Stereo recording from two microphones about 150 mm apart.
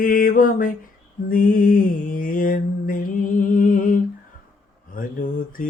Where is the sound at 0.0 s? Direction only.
70° left (ahead or behind).